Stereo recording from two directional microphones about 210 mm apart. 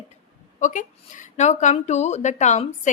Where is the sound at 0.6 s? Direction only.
35° left (ahead or behind).